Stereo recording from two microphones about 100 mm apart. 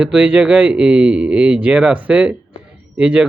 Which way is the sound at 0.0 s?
10° right (ahead or behind).